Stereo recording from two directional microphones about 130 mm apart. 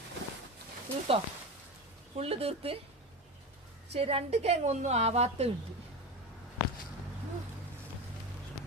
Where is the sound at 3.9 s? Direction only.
50° right (ahead or behind).